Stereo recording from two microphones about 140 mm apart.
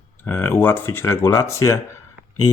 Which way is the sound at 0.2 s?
15° left (ahead or behind).